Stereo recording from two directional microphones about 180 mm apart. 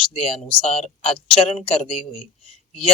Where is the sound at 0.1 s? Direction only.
30° left (ahead or behind).